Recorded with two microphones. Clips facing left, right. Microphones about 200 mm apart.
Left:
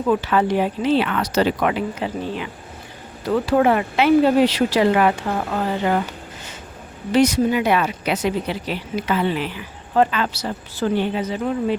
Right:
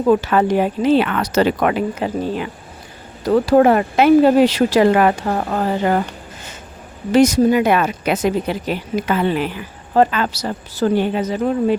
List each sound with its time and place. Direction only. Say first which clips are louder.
0.1 s speech: right 4 dB; 45° right (ahead or behind)
7.1 s speech: right 4 dB; 45° right (ahead or behind)